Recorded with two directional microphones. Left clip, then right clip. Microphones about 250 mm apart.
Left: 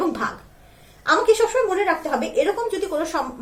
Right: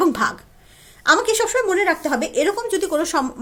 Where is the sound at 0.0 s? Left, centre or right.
Right.